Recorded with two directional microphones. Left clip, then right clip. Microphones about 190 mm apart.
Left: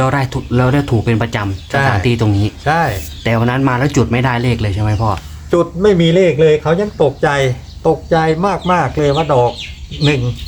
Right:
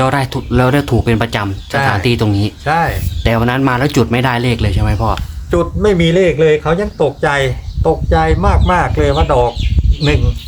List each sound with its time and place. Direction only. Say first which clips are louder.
0.0 s speech: right 1 dB; 25° right (ahead or behind)
2.6 s a man's voice: even; centre (ahead or behind)
3.2 s speech: right 1 dB; 20° right (ahead or behind)
5.5 s a man's voice: left 1 dB; centre (ahead or behind)